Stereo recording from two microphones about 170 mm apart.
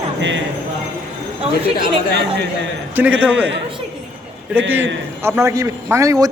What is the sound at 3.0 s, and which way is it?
Speech, 10° right (ahead or behind).